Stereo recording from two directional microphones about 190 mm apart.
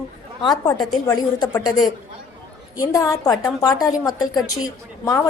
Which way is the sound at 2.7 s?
15° left (ahead or behind).